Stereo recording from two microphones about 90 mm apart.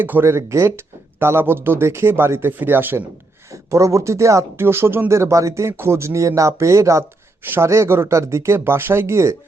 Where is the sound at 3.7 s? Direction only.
35° right (ahead or behind).